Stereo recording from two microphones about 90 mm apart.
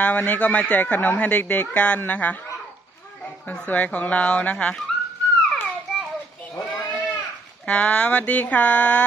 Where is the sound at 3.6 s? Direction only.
15° left (ahead or behind).